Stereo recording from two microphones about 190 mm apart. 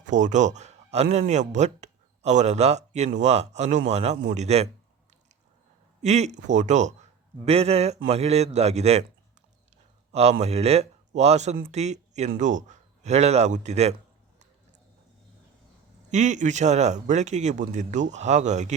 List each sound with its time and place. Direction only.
0.0 s speech: 40° right (ahead or behind)
6.0 s speech: 35° right (ahead or behind)
10.1 s speech: 35° right (ahead or behind)
16.0 s speech: 40° right (ahead or behind)